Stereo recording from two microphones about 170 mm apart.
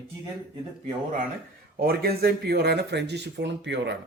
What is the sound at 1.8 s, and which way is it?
Speech, 65° right (ahead or behind).